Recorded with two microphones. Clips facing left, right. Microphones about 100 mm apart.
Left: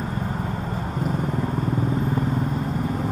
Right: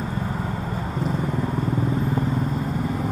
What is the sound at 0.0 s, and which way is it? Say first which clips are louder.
Vehicle: even; 40° left (ahead or behind).